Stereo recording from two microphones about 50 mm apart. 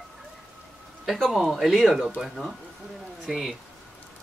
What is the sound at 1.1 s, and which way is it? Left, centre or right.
Speech, centre.